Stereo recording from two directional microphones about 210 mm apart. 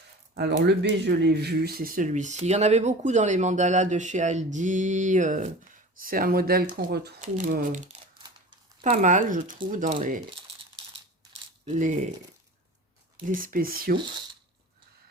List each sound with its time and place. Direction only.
0.6 s speech: 55° right (ahead or behind); by 10.2 s 40° right (ahead or behind)
11.6 s speech: 35° right (ahead or behind)
13.2 s speech: 40° right (ahead or behind)